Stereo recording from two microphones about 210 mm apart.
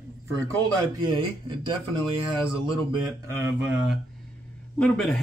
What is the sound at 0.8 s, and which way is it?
Speech, 20° right (ahead or behind).